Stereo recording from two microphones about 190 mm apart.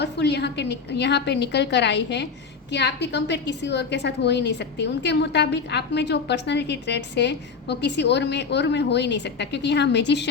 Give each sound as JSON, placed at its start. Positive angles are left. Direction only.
{"t": 0.0, "sound": "a woman's voice", "side_deg": 60}